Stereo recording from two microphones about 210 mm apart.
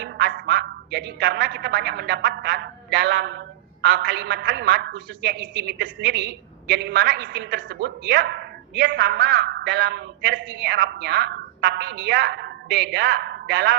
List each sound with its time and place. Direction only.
0.0 s a man's voice: 55° right (ahead or behind)